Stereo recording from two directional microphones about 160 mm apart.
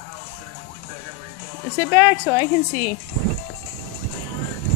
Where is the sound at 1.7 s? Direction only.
20° left (ahead or behind).